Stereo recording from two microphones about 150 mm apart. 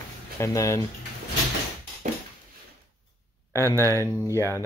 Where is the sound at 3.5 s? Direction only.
20° left (ahead or behind).